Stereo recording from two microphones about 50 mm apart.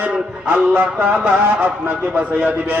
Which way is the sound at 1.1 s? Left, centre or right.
Centre.